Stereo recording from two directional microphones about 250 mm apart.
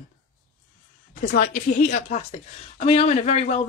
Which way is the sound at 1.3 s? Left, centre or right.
Left.